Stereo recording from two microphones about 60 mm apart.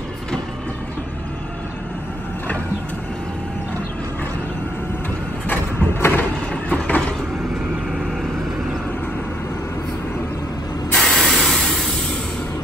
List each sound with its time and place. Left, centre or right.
5.9 s a sound: left
6.5 s vehicle: left
10.9 s spray: centre